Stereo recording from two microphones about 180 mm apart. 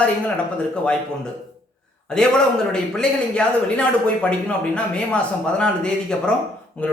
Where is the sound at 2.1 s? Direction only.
5° left (ahead or behind).